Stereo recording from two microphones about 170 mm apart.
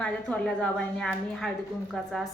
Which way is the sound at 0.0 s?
5° left (ahead or behind).